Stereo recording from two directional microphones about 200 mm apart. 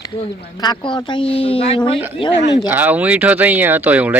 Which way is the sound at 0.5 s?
20° left (ahead or behind).